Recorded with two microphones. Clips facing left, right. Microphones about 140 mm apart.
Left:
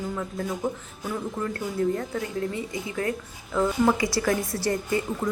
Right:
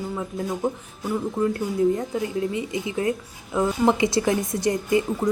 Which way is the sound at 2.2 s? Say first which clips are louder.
Right 4 dB; 20° right (ahead or behind).